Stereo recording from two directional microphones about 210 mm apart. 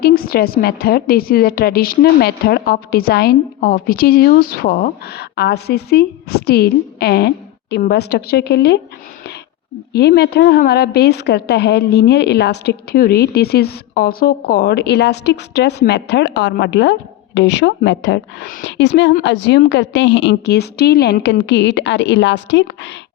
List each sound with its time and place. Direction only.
0.0 s a woman's voice: 45° left (ahead or behind)
9.9 s a woman's voice: 50° left (ahead or behind)